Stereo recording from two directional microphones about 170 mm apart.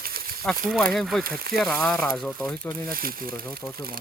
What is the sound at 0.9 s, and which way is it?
Speech, centre (ahead or behind).